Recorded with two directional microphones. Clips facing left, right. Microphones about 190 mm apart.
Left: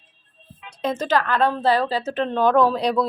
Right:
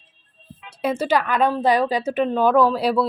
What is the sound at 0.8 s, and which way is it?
Speech, 10° right (ahead or behind).